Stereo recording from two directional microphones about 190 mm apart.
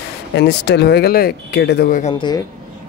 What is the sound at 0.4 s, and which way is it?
Speech, 65° left (ahead or behind).